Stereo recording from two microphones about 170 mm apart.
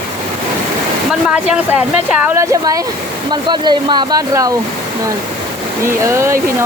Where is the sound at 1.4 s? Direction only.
5° right (ahead or behind).